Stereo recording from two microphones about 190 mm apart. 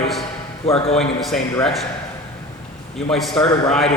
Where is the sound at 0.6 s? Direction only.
30° left (ahead or behind).